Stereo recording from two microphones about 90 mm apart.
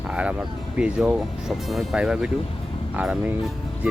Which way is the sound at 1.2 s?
Centre (ahead or behind).